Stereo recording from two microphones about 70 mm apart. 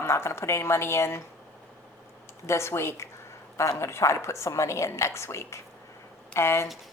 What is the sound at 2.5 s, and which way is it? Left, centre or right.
A woman's voice, left.